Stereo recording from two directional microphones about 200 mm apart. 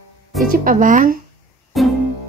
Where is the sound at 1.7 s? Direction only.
Centre (ahead or behind).